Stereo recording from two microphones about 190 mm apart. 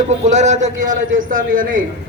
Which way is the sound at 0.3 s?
40° right (ahead or behind).